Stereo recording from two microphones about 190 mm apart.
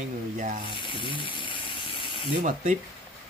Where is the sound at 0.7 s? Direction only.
25° left (ahead or behind).